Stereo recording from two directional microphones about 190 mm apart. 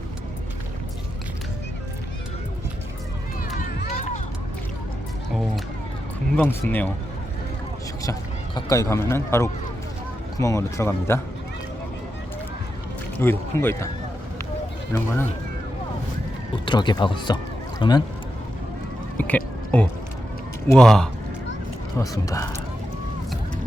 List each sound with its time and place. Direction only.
3.8 s a sound: 40° left (ahead or behind)
6.5 s a man's voice: 10° left (ahead or behind)
8.5 s a man's voice: 15° left (ahead or behind)
13.1 s a man's voice: 10° left (ahead or behind)
14.9 s a man's voice: 15° left (ahead or behind)
16.6 s speech: 25° left (ahead or behind)
19.1 s a sound: 5° left (ahead or behind)
20.7 s a man's voice: 5° left (ahead or behind)
21.9 s a man's voice: 20° left (ahead or behind)